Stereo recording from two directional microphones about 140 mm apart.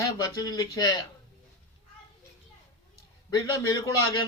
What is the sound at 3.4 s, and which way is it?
Speech, 30° left (ahead or behind).